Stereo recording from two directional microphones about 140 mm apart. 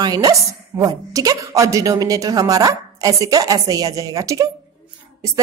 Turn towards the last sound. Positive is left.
turn(degrees=-25)  # may be behind; listen again after turning